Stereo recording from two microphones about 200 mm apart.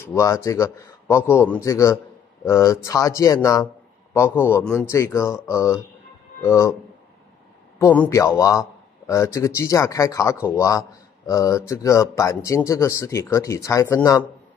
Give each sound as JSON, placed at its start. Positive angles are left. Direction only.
{"t": 0.0, "sound": "a man's voice", "side_deg": 15}
{"t": 7.8, "sound": "a man's voice", "side_deg": 10}